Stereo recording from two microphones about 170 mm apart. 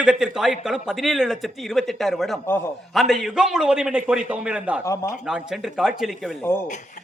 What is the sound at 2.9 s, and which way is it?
Speech, centre (ahead or behind).